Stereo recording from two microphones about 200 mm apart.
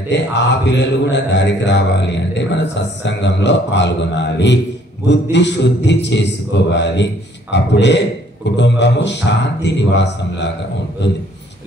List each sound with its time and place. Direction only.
0.1 s speech: 60° left (ahead or behind)